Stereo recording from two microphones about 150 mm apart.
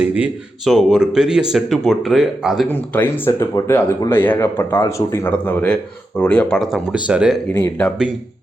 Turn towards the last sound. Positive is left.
turn(degrees=10)  # may be behind; listen again after turning